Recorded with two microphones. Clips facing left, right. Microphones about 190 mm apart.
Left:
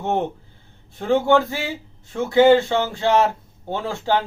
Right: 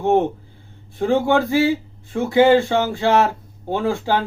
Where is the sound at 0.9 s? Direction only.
15° right (ahead or behind).